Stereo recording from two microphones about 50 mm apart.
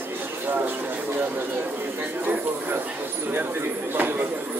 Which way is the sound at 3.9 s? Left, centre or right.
Right.